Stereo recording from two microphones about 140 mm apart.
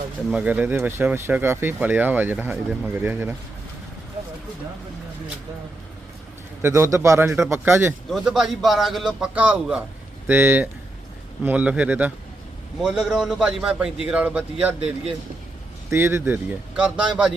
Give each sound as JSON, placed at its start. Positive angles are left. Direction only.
{"t": 0.3, "sound": "speech", "side_deg": -10}
{"t": 6.6, "sound": "a man's voice", "side_deg": -20}
{"t": 8.1, "sound": "a man's voice", "side_deg": -5}
{"t": 15.9, "sound": "speech", "side_deg": -20}